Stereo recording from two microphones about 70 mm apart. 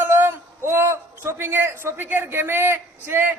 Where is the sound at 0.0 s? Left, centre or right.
Right.